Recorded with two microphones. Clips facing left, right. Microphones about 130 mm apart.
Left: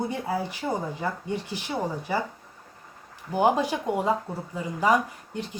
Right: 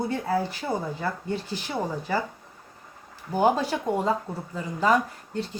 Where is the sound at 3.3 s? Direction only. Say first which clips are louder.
Even; 15° left (ahead or behind).